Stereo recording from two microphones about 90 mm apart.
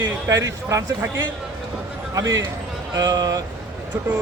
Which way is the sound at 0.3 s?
35° right (ahead or behind).